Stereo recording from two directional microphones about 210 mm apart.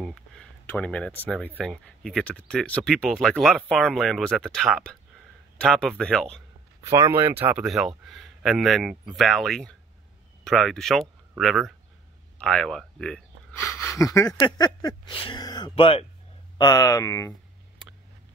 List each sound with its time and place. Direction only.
0.0 s a sound: centre (ahead or behind)
1.3 s speech: 5° left (ahead or behind)
6.8 s speech: 15° right (ahead or behind); by 17.3 s 15° left (ahead or behind)